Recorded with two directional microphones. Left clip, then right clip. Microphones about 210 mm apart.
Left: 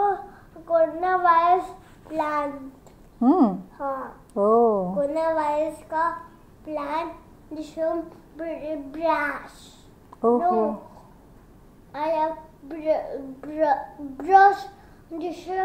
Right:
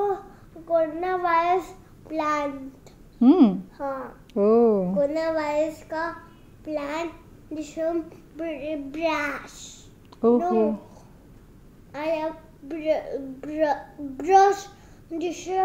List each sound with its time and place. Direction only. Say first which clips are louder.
0.7 s a woman's voice: left 3 dB; 10° right (ahead or behind)
3.2 s a woman's voice: right 2 dB; 30° right (ahead or behind)
3.7 s a woman's voice: left 1 dB; 5° right (ahead or behind)
4.4 s speech: even; 60° right (ahead or behind)
5.0 s child singing: left 1 dB; 5° right (ahead or behind)
6.6 s a child's voice: left 1 dB; 5° right (ahead or behind)
11.9 s a child's voice: left 3 dB; 5° right (ahead or behind)